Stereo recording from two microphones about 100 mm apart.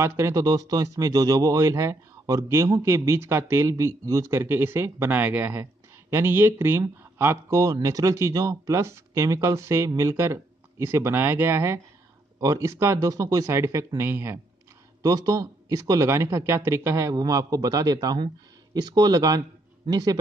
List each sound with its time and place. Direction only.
0.0 s speech: 30° right (ahead or behind)
15.0 s speech: 40° right (ahead or behind)